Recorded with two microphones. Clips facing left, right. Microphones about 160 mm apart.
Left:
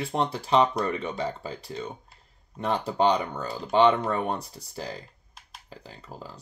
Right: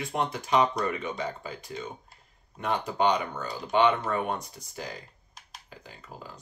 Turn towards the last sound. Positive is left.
turn(degrees=35)  # may be behind; listen again after turning